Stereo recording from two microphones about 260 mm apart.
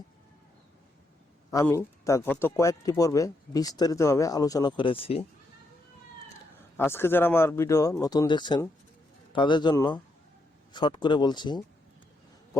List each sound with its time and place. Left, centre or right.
1.5 s speech: centre
6.7 s speech: centre